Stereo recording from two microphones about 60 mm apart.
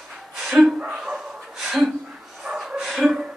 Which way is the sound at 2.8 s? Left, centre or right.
Centre.